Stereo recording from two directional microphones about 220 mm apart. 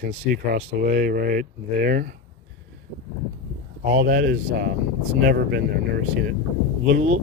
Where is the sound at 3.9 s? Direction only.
40° right (ahead or behind).